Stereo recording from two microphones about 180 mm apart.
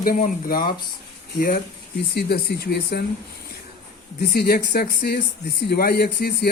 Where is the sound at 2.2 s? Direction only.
60° left (ahead or behind).